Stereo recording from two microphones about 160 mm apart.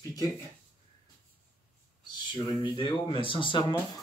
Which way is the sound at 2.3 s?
30° left (ahead or behind).